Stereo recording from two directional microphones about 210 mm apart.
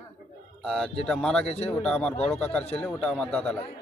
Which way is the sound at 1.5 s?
30° left (ahead or behind).